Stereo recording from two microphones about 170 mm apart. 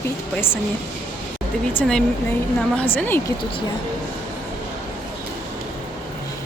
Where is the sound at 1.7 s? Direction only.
5° left (ahead or behind).